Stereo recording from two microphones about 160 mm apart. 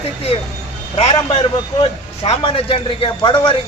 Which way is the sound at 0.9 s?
35° left (ahead or behind).